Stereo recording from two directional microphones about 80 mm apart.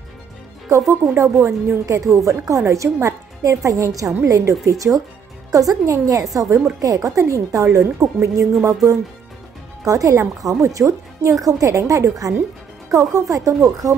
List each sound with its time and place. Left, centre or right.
0.7 s a woman's voice: right
9.8 s a woman's voice: right